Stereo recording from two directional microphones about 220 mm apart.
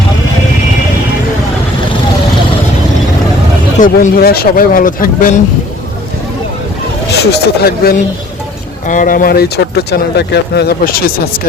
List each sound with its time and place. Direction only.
3.8 s speech: 35° left (ahead or behind)
7.1 s speech: 45° left (ahead or behind)